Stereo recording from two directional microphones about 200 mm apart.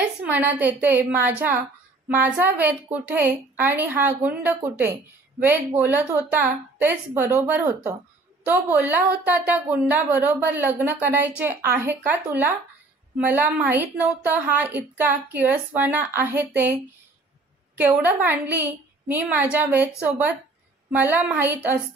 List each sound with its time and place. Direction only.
0.2 s a woman's voice: 10° right (ahead or behind)
17.7 s a woman's voice: 10° right (ahead or behind)